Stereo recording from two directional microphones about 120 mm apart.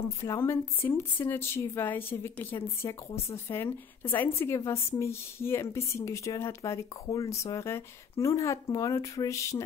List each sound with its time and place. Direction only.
0.2 s speech: 20° left (ahead or behind)